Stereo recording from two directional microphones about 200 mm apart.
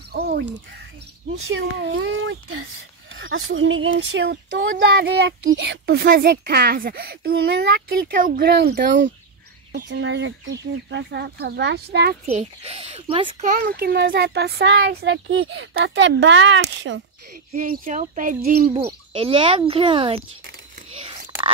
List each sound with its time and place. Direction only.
0.1 s a sound: 50° right (ahead or behind)
1.5 s a child's voice: 65° right (ahead or behind)
12.3 s speech: 30° right (ahead or behind)
13.5 s a child's voice: 45° right (ahead or behind); by 17.0 s 65° right (ahead or behind)
17.5 s speech: 40° right (ahead or behind)
18.7 s speech: 25° right (ahead or behind)